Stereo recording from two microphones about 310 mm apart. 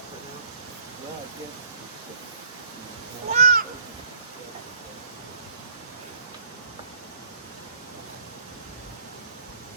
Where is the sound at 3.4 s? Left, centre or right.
Right.